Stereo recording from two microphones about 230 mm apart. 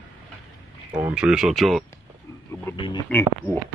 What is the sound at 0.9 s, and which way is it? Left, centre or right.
Speech, centre.